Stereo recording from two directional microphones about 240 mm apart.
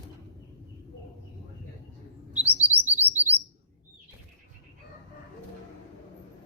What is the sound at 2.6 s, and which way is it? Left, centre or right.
Chirp, centre.